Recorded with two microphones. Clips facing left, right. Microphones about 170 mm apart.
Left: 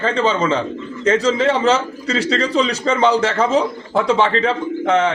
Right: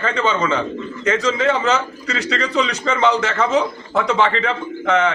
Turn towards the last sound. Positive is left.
turn(degrees=30)  # may be behind; listen again after turning